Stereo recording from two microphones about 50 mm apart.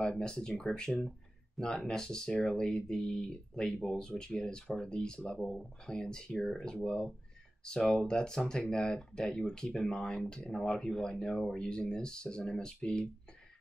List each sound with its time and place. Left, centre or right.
0.0 s speech: centre